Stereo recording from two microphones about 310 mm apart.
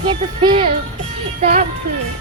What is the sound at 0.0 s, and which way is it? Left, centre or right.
Music, centre.